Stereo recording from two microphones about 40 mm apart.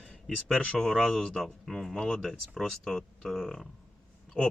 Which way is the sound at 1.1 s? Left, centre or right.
Left.